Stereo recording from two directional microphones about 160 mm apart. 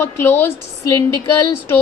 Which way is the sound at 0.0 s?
10° left (ahead or behind).